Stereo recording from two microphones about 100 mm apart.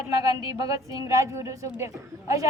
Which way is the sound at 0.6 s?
35° right (ahead or behind).